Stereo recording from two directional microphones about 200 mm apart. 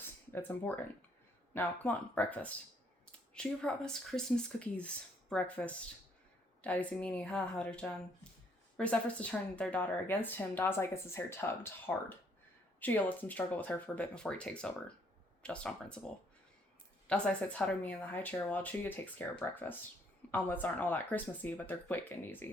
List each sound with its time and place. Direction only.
0.0 s a sound: 10° left (ahead or behind)
1.5 s a woman's voice: 5° left (ahead or behind)
17.1 s a woman's voice: 5° left (ahead or behind)